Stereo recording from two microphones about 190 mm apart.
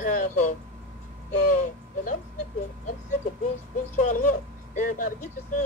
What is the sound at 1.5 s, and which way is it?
Speech, 45° left (ahead or behind).